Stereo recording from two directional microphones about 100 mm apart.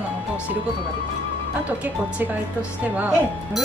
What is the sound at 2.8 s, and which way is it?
Speech, 15° right (ahead or behind).